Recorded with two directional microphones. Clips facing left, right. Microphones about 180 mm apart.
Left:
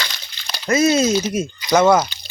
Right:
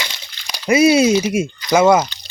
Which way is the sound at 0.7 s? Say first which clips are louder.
Right 4 dB; 10° right (ahead or behind).